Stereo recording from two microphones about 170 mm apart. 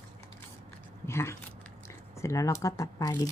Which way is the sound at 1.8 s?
15° left (ahead or behind).